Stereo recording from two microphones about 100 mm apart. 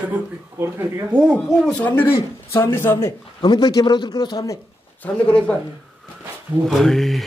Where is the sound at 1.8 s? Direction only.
20° left (ahead or behind).